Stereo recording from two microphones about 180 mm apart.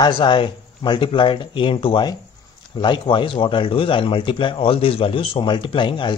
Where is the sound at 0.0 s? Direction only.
25° left (ahead or behind).